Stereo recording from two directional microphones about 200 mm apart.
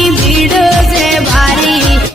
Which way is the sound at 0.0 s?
Centre (ahead or behind).